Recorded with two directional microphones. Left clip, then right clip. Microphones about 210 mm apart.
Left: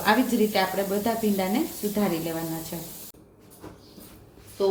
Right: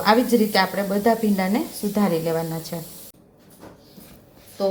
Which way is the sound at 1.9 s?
30° right (ahead or behind).